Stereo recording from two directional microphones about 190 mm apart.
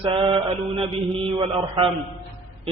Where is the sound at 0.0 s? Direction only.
30° right (ahead or behind).